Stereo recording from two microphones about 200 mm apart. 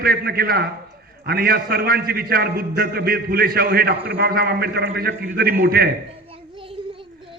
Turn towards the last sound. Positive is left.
turn(degrees=-50)  # may be behind; listen again after turning